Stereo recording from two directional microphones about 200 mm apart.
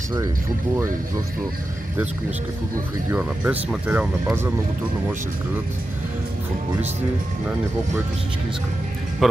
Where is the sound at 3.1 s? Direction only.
5° right (ahead or behind).